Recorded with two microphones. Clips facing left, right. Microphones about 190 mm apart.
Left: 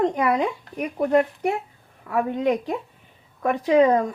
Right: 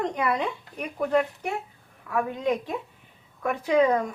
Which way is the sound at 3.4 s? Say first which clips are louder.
Left 4 dB; 35° left (ahead or behind).